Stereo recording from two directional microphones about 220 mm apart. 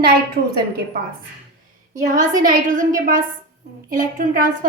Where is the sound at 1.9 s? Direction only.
35° right (ahead or behind).